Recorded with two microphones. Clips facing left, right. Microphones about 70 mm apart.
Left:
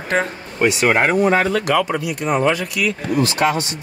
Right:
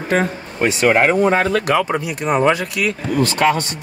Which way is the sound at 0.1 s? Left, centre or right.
Centre.